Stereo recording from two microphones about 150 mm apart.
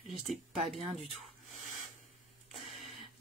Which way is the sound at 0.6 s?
50° right (ahead or behind).